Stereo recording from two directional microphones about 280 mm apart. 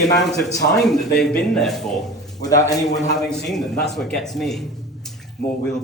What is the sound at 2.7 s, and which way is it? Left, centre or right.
Speech, centre.